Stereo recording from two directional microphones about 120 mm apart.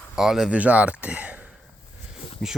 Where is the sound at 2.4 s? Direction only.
5° left (ahead or behind).